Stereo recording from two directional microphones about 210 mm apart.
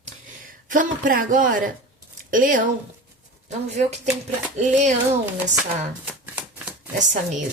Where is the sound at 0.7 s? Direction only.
40° right (ahead or behind).